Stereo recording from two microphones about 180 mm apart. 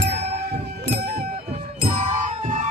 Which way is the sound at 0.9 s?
60° right (ahead or behind).